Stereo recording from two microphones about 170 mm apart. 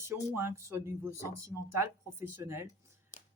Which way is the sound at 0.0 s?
15° right (ahead or behind).